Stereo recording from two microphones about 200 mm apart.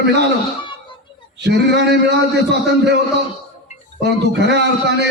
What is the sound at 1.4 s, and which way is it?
Speech, 60° right (ahead or behind).